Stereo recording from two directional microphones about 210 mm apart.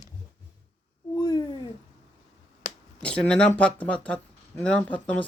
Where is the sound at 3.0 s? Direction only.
5° left (ahead or behind).